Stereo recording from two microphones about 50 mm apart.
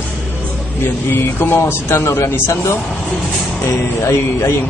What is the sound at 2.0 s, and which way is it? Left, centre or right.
Speech, left.